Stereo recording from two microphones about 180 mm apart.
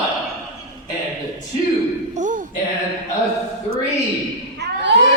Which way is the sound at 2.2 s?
45° right (ahead or behind).